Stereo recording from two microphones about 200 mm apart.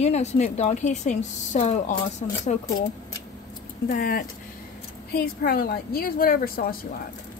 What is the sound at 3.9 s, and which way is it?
A woman's voice, 45° left (ahead or behind).